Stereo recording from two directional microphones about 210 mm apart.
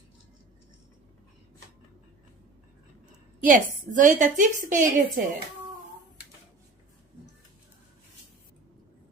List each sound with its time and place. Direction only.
3.4 s a woman's voice: 40° right (ahead or behind)